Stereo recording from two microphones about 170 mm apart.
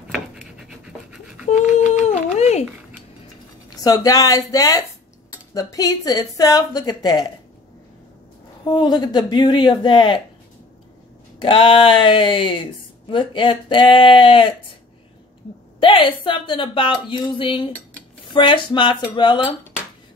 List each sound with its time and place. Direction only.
0.1 s scratch: 5° right (ahead or behind)
2.3 s a sound: 40° left (ahead or behind)
3.7 s a woman's voice: 20° left (ahead or behind)
8.6 s a woman's voice: 25° left (ahead or behind)
11.4 s a woman's voice: 30° left (ahead or behind)
15.8 s a woman's voice: 30° left (ahead or behind)